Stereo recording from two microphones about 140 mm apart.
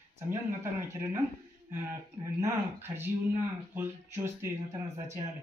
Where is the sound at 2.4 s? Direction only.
15° right (ahead or behind).